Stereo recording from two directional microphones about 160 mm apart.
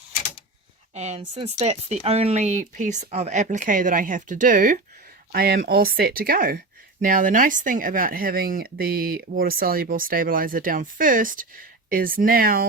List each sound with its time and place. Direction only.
0.9 s speech: 45° right (ahead or behind)
5.3 s speech: 75° right (ahead or behind)